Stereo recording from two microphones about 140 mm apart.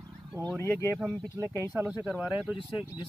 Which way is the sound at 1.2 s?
25° right (ahead or behind).